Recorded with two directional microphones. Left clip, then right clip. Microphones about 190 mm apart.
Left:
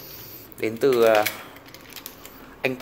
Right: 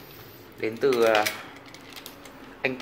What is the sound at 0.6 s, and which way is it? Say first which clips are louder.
Speech: left 3 dB; 45° left (ahead or behind).